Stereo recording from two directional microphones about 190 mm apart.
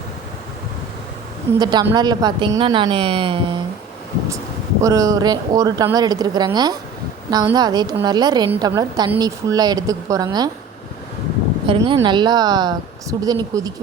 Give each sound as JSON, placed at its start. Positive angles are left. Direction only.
{"t": 1.5, "sound": "a woman's voice", "side_deg": -20}
{"t": 4.8, "sound": "a woman's voice", "side_deg": -15}
{"t": 11.6, "sound": "a woman's voice", "side_deg": -25}